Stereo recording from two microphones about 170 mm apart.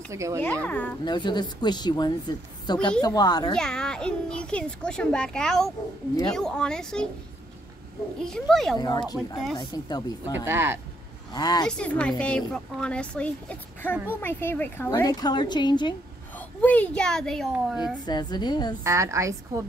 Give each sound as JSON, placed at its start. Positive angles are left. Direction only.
{"t": 0.1, "sound": "a woman's voice", "side_deg": -15}
{"t": 0.4, "sound": "a woman's voice", "side_deg": 10}
{"t": 1.0, "sound": "a woman's voice", "side_deg": 25}
{"t": 3.5, "sound": "a child's voice", "side_deg": 5}
{"t": 8.2, "sound": "a child's voice", "side_deg": 0}
{"t": 8.7, "sound": "a woman's voice", "side_deg": 25}
{"t": 10.4, "sound": "a woman's voice", "side_deg": -15}
{"t": 11.3, "sound": "a woman's voice", "side_deg": 25}
{"t": 11.6, "sound": "a woman's voice", "side_deg": 5}
{"t": 16.3, "sound": "speech", "side_deg": 10}
{"t": 18.0, "sound": "a woman's voice", "side_deg": 25}
{"t": 18.9, "sound": "a woman's voice", "side_deg": -15}